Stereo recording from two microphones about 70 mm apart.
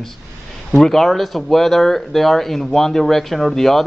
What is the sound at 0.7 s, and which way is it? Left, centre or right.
Speech, centre.